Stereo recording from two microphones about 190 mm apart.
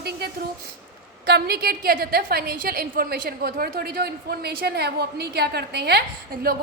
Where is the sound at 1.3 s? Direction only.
55° right (ahead or behind).